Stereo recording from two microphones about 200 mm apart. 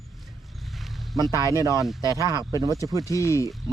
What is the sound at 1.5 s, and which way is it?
Speech, 15° right (ahead or behind).